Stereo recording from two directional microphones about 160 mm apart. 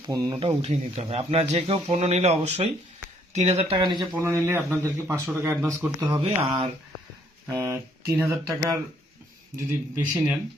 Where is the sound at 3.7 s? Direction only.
30° right (ahead or behind).